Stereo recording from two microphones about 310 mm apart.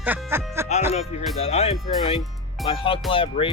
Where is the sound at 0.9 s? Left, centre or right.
Centre.